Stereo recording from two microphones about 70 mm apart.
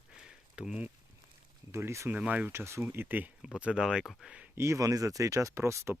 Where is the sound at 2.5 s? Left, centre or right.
Right.